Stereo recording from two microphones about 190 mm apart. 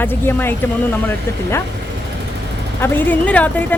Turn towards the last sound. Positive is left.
turn(degrees=10)  # may be behind; listen again after turning